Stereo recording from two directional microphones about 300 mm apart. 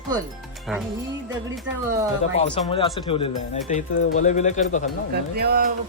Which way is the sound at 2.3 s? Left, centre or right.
Left.